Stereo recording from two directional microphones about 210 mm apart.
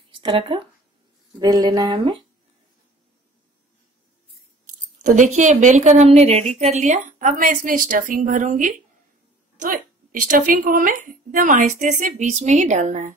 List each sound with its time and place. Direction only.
0.1 s speech: 25° right (ahead or behind)
5.0 s a woman's voice: 35° right (ahead or behind)
10.3 s a woman's voice: 40° right (ahead or behind)